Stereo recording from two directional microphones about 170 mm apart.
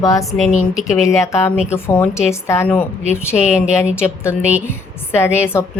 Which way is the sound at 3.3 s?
5° right (ahead or behind).